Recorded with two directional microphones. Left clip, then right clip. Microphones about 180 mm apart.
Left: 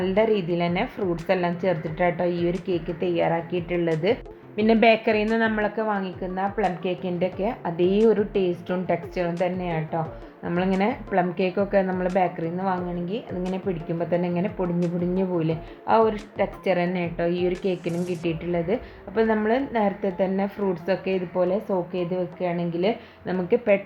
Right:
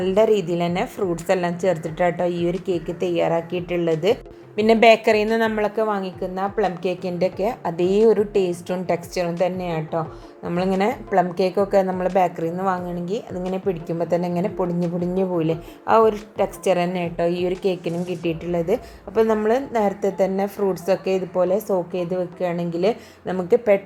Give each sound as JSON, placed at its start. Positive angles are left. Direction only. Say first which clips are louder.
{"t": 0.0, "sound": "a woman's voice", "louder": "right 4 dB", "side_deg": -15}